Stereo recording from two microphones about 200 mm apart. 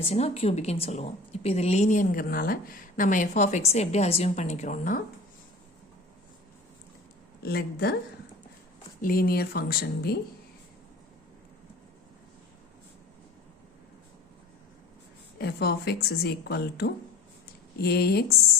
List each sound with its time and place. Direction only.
0.0 s a woman's voice: 30° left (ahead or behind)
7.4 s speech: 50° left (ahead or behind)
9.0 s speech: 45° left (ahead or behind)
15.4 s speech: 55° left (ahead or behind)